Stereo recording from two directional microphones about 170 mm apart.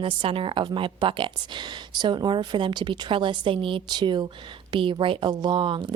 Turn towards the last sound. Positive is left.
turn(degrees=-25)  # may be behind; listen again after turning